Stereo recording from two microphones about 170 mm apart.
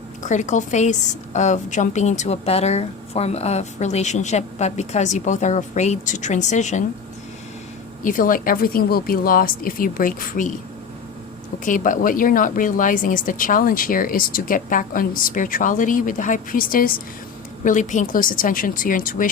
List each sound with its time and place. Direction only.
0.2 s a woman's voice: 45° left (ahead or behind)
8.0 s a woman's voice: 55° left (ahead or behind)
11.6 s a woman's voice: 50° left (ahead or behind)